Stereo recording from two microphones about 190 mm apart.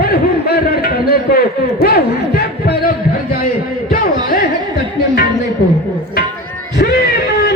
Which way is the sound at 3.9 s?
45° left (ahead or behind).